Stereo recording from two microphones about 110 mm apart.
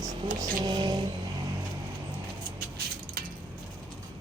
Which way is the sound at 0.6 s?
45° right (ahead or behind).